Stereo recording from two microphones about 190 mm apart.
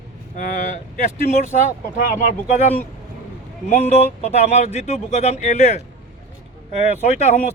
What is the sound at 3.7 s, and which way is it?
Speech, 35° left (ahead or behind).